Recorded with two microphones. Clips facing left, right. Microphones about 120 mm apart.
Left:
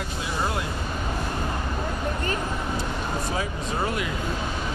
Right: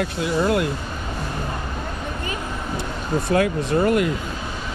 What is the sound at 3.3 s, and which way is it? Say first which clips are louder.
Speech: right 9 dB; 60° right (ahead or behind).